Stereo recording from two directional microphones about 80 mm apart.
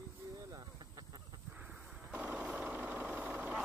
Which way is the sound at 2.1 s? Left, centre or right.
Centre.